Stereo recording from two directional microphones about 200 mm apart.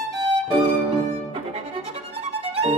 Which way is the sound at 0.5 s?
30° right (ahead or behind).